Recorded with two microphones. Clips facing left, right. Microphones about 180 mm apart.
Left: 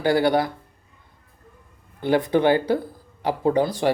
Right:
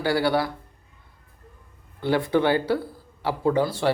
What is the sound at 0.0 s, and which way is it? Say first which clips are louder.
Speech: left 3 dB; 20° left (ahead or behind).